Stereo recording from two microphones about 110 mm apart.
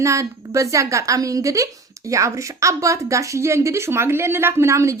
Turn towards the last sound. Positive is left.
turn(degrees=-25)  # may be behind; listen again after turning